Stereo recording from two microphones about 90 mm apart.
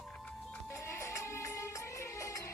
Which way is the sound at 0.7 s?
30° left (ahead or behind).